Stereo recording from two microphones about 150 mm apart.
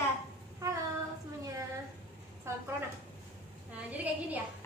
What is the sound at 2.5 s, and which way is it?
Speech, 20° right (ahead or behind).